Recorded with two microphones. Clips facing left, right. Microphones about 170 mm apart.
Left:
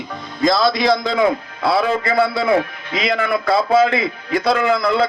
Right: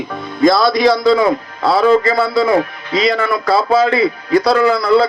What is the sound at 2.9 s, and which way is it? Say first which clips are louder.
A man's voice: right 4 dB; 35° right (ahead or behind).